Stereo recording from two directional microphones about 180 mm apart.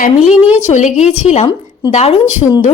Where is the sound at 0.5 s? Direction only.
40° left (ahead or behind).